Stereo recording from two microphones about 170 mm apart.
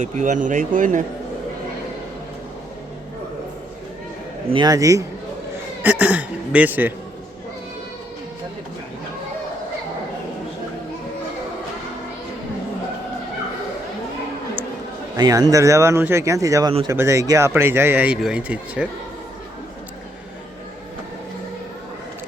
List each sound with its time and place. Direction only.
0.0 s speech: 45° right (ahead or behind)
4.4 s speech: 25° right (ahead or behind); by 6.9 s 10° right (ahead or behind)
15.1 s speech: 20° right (ahead or behind)